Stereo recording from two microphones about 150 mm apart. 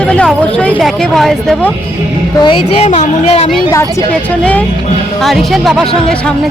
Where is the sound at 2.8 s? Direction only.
45° left (ahead or behind).